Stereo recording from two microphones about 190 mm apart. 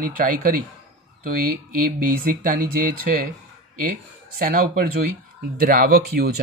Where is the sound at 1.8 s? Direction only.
50° right (ahead or behind).